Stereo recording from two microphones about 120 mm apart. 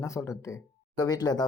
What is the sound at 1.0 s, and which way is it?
Speech, 35° left (ahead or behind).